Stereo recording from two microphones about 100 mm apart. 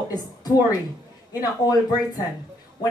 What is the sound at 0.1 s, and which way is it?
Speech, 40° left (ahead or behind).